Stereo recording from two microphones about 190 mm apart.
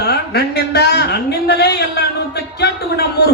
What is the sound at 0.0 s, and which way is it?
A man's voice, 60° left (ahead or behind).